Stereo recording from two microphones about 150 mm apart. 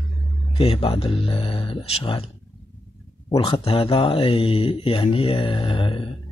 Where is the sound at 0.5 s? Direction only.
40° left (ahead or behind).